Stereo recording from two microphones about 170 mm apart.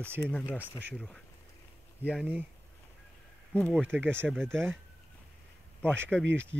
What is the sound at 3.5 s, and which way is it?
Speech, 5° left (ahead or behind).